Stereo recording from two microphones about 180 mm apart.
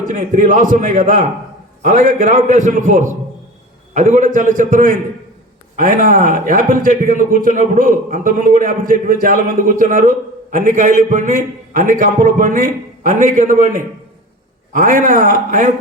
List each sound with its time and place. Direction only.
0.0 s a man's voice: 45° right (ahead or behind)